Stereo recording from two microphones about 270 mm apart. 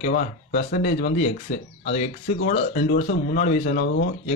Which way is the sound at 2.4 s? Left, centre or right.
Left.